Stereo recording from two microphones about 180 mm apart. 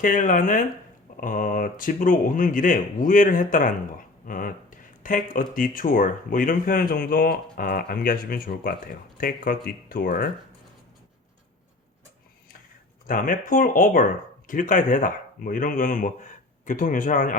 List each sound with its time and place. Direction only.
0.0 s speech: 45° left (ahead or behind)
13.1 s speech: 50° left (ahead or behind)